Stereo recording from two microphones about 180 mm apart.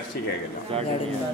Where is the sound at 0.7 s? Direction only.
30° right (ahead or behind).